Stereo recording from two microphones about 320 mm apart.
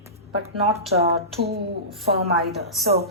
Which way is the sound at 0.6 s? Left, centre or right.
Right.